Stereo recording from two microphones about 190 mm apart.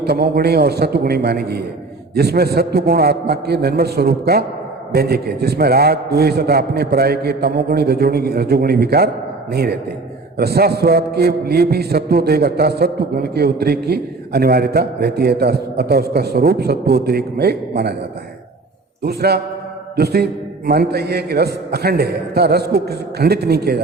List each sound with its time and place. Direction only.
0.0 s a man's voice: 55° right (ahead or behind)
19.0 s a man's voice: 55° right (ahead or behind)